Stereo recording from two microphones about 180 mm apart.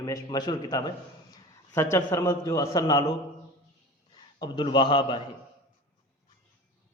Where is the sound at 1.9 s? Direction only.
15° left (ahead or behind).